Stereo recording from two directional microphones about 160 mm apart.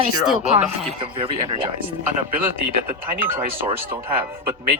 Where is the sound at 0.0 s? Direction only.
40° right (ahead or behind).